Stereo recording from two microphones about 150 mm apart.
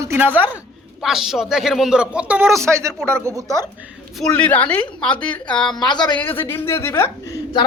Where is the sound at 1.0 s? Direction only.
Centre (ahead or behind); by 3.6 s 20° right (ahead or behind).